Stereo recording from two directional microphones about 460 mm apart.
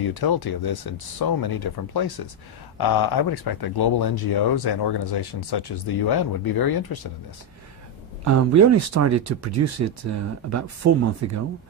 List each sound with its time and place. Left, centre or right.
0.0 s speech: left
8.3 s speech: right